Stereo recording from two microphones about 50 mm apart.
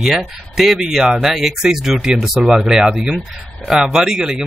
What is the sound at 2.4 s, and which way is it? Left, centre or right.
Speech, centre.